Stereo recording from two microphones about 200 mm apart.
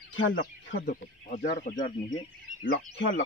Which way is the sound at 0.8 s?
40° left (ahead or behind).